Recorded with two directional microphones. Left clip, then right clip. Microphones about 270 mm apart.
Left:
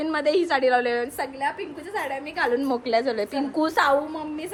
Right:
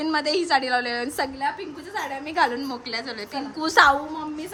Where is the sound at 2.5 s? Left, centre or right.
Centre.